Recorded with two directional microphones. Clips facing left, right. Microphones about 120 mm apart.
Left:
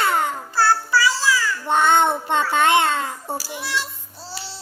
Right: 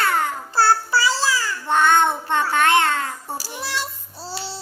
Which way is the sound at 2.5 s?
20° left (ahead or behind).